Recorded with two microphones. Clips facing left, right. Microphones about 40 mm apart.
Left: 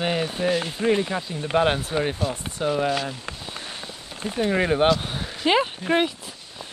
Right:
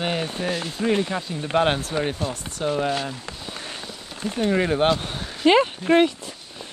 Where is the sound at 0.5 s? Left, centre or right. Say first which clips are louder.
Left 3 dB; left.